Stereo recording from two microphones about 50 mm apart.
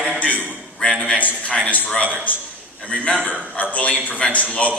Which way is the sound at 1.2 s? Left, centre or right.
Left.